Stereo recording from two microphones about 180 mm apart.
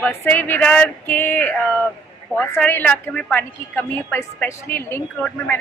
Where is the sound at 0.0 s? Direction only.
10° left (ahead or behind).